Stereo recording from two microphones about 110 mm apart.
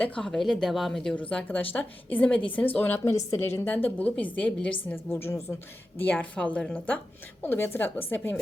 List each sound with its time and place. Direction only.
0.0 s a woman's voice: 5° left (ahead or behind)